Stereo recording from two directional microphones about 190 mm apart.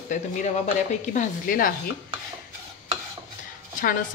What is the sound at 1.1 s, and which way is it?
Speech, 45° left (ahead or behind).